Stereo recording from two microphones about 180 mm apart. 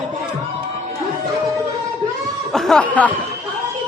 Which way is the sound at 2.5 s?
Centre (ahead or behind).